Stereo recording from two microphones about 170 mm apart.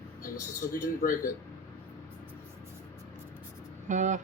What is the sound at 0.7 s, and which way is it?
Speech, 55° left (ahead or behind).